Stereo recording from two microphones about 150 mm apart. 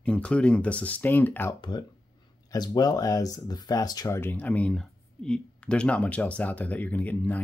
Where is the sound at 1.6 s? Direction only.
30° left (ahead or behind); by 7.4 s 10° left (ahead or behind).